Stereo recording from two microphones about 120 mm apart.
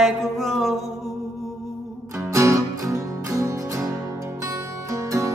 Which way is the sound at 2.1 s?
25° right (ahead or behind).